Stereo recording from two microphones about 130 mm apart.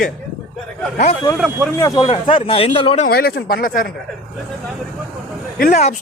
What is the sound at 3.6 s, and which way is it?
Speech, 90° left.